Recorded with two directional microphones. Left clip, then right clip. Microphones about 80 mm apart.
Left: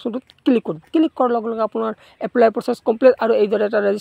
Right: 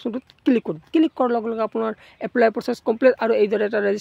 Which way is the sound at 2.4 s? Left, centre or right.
Left.